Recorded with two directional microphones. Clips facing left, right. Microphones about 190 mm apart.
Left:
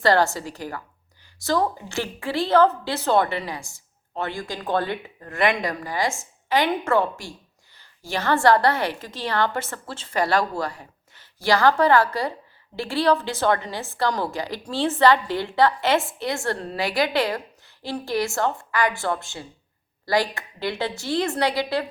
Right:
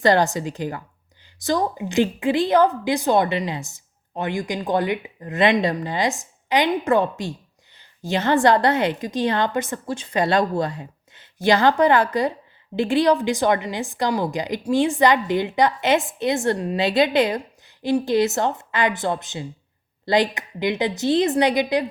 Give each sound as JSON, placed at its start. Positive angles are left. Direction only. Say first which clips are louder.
{"t": 0.0, "sound": "a woman's voice", "louder": "right 2 dB", "side_deg": -20}